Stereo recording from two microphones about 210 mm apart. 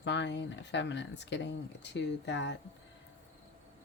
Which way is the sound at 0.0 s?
55° left (ahead or behind).